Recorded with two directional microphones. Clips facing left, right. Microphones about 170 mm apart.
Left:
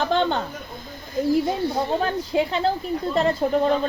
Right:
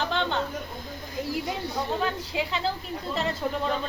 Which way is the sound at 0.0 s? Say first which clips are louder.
Left 6 dB; 40° left (ahead or behind).